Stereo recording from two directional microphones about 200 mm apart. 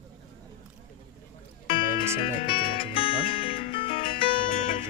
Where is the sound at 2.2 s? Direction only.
25° left (ahead or behind).